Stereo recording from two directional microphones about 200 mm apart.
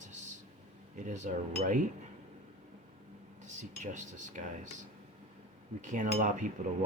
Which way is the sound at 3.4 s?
40° right (ahead or behind).